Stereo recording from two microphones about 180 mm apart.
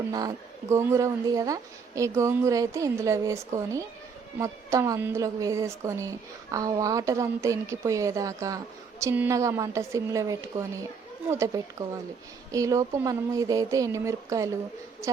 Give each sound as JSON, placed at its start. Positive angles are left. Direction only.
{"t": 0.1, "sound": "a woman's voice", "side_deg": -20}